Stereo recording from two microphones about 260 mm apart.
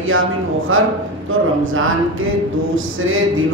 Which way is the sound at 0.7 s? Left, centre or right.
Right.